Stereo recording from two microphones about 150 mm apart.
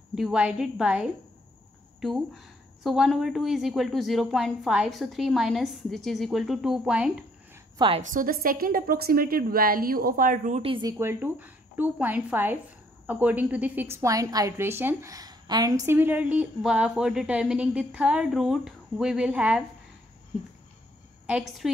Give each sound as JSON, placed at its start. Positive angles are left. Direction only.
{"t": 0.1, "sound": "a woman's voice", "side_deg": -5}
{"t": 7.7, "sound": "a woman's voice", "side_deg": -35}
{"t": 8.0, "sound": "a woman's voice", "side_deg": -65}
{"t": 10.6, "sound": "speech", "side_deg": -35}
{"t": 10.9, "sound": "a woman's voice", "side_deg": -15}
{"t": 21.3, "sound": "a woman's voice", "side_deg": -5}